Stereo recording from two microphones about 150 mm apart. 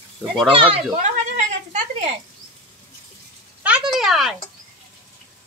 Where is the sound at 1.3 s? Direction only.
50° right (ahead or behind).